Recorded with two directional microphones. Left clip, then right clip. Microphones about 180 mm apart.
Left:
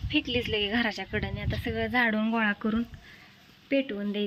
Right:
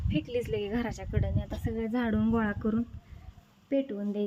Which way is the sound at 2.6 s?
5° right (ahead or behind).